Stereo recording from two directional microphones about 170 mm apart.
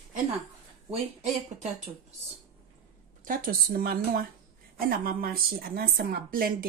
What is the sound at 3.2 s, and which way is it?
A woman's voice, 55° right (ahead or behind).